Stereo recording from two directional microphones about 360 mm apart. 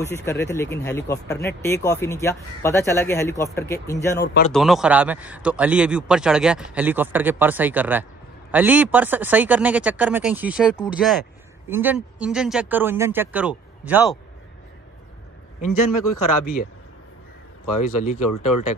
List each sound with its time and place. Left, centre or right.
0.0 s speech: centre
4.2 s speech: left
4.5 s speech: centre
15.6 s a man's voice: left
18.0 s speech: left
18.3 s a man's voice: left